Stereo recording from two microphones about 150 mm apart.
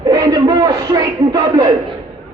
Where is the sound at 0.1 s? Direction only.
25° right (ahead or behind).